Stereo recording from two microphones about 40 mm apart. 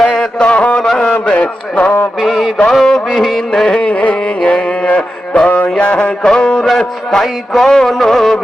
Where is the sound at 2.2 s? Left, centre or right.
Centre.